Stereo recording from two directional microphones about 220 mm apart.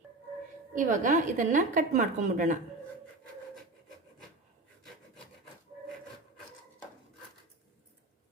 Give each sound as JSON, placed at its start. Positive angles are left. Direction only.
{"t": 0.7, "sound": "a woman's voice", "side_deg": -35}